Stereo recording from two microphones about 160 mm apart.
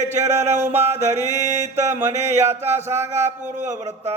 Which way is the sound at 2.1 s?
45° right (ahead or behind).